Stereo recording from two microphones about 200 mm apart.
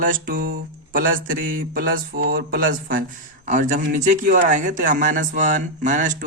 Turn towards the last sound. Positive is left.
turn(degrees=-40)  # may be behind; listen again after turning